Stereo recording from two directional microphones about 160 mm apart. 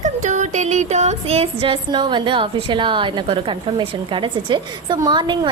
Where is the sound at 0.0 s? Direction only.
50° right (ahead or behind).